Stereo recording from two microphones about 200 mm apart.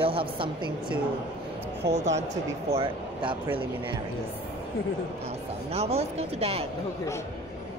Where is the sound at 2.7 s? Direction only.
25° right (ahead or behind).